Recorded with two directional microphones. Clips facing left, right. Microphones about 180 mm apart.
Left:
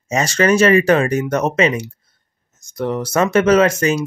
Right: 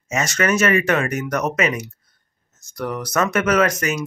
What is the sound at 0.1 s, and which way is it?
Speech, 30° left (ahead or behind).